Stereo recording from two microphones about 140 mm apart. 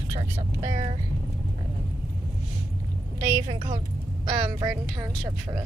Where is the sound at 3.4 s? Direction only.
35° right (ahead or behind).